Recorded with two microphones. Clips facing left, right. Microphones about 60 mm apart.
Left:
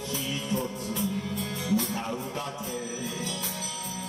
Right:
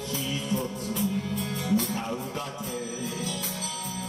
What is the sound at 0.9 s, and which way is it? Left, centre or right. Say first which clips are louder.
Music: right 4 dB; right.